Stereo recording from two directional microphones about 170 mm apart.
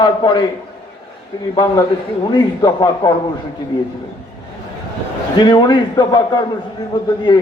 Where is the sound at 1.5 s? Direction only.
25° left (ahead or behind).